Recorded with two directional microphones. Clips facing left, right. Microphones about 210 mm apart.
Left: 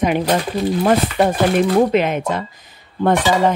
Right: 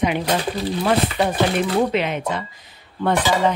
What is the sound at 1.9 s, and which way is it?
Speech, 45° left (ahead or behind).